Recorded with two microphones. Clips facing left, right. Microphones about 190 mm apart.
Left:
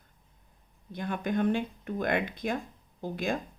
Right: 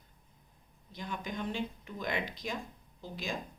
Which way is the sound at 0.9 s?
55° left (ahead or behind).